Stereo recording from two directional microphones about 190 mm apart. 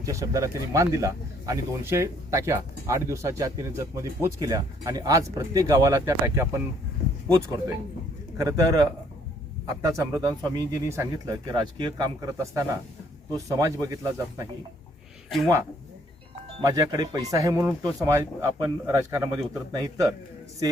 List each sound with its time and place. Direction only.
0.0 s speech: 15° right (ahead or behind)
8.4 s speech: 20° right (ahead or behind)
16.6 s speech: 20° right (ahead or behind)